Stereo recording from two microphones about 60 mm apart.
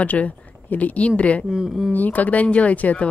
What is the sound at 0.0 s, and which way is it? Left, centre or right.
Speech, left.